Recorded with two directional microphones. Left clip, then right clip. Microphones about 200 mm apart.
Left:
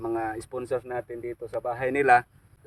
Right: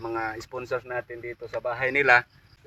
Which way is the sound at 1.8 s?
45° left (ahead or behind).